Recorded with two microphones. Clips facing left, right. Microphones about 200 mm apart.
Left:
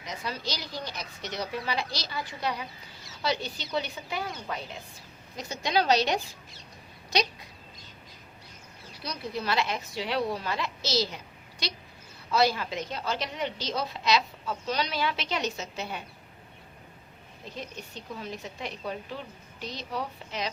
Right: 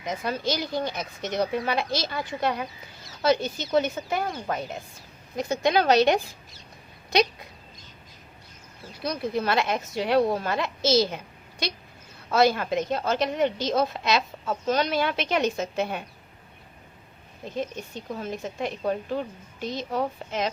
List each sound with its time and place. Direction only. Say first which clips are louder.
0.0 s a woman's voice: right 7 dB; 50° right (ahead or behind)
9.0 s a woman's voice: right 7 dB; 50° right (ahead or behind)
12.3 s a woman's voice: right 5 dB; 50° right (ahead or behind)
17.5 s a woman's voice: right 9 dB; 50° right (ahead or behind)